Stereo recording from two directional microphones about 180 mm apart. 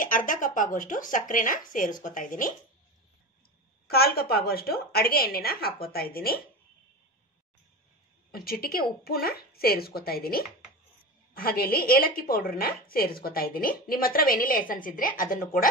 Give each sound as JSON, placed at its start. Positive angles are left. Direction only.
{"t": 0.0, "sound": "speech", "side_deg": 50}
{"t": 3.9, "sound": "a woman's voice", "side_deg": 60}
{"t": 8.3, "sound": "a woman's voice", "side_deg": 55}